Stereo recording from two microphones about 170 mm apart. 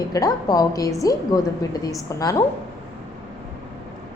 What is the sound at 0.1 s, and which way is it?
A woman's voice, 20° left (ahead or behind).